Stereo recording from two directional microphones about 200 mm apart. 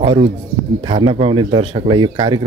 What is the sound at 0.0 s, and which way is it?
Speech, 30° right (ahead or behind).